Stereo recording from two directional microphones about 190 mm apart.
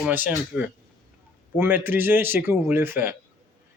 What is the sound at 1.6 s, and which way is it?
Speech, 10° right (ahead or behind).